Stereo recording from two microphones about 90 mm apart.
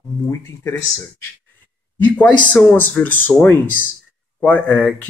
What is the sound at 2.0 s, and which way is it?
A man's voice, 15° left (ahead or behind).